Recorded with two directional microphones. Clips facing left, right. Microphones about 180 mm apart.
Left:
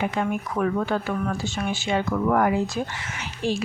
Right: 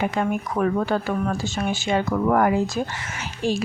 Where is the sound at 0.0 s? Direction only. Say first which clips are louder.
Right 2 dB; 40° right (ahead or behind).